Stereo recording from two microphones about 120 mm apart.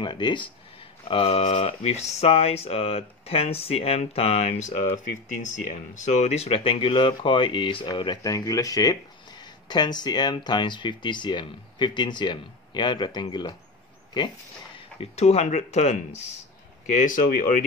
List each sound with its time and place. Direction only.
0.0 s speech: 40° left (ahead or behind)
1.0 s speech: 50° left (ahead or behind)
15.0 s speech: 65° left (ahead or behind)
16.9 s speech: 90° left